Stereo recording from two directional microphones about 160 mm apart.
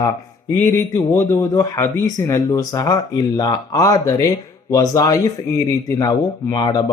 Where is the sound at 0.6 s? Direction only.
15° left (ahead or behind).